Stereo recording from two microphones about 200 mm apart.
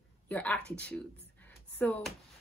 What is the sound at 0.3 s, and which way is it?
Speech, 5° left (ahead or behind).